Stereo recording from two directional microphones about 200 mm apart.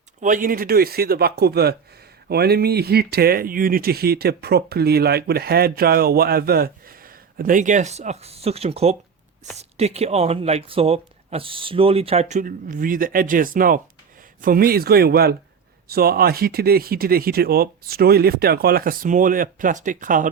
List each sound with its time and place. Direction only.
0.2 s speech: 40° right (ahead or behind)